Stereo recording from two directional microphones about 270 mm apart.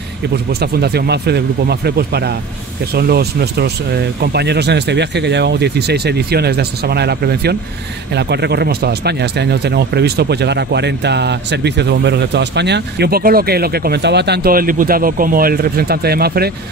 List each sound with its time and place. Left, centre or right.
0.5 s speech: right